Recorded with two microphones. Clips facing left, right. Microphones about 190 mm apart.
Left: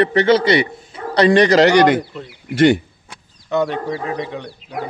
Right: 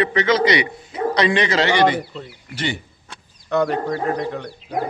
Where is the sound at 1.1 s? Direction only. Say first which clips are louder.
Left 8 dB; 35° left (ahead or behind).